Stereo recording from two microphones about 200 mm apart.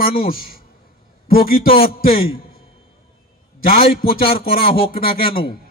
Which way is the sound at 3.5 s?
45° left (ahead or behind).